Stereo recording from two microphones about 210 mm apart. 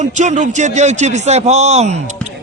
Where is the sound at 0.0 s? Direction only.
35° right (ahead or behind).